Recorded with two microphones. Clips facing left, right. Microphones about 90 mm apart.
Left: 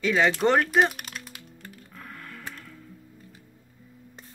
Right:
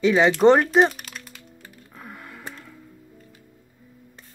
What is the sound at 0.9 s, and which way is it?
Typing, 5° left (ahead or behind).